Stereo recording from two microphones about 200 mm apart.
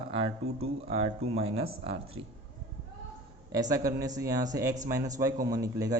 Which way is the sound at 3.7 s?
15° right (ahead or behind).